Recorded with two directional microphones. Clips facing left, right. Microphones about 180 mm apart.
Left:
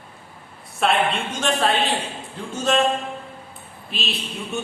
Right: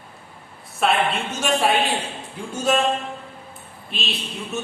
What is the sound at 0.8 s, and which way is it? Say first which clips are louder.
A woman's voice: even; 5° right (ahead or behind).